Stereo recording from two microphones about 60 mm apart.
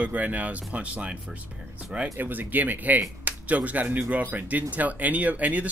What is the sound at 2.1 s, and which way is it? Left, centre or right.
Speech, right.